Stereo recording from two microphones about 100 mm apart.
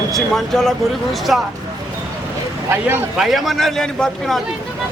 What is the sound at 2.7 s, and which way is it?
Speech, 20° right (ahead or behind).